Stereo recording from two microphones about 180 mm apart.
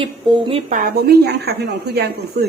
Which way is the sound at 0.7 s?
50° right (ahead or behind).